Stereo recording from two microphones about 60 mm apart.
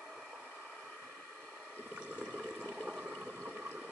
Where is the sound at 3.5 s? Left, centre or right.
Right.